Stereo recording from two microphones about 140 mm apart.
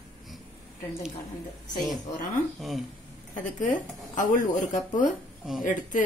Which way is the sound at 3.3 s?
65° left (ahead or behind).